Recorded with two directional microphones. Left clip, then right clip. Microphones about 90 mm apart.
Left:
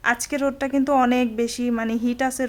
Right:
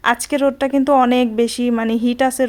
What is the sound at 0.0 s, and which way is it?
Speech, 40° right (ahead or behind).